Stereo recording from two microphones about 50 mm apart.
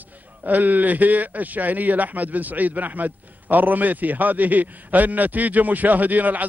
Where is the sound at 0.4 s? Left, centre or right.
Right.